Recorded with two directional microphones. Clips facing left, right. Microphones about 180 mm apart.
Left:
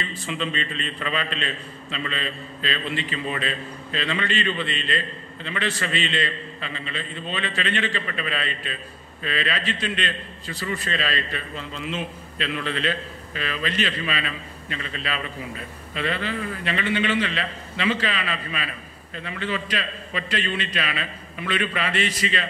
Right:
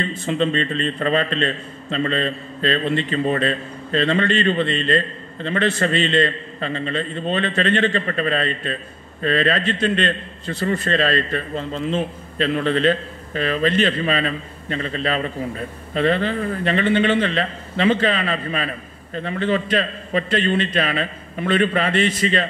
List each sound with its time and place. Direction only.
0.3 s a man's voice: 40° right (ahead or behind)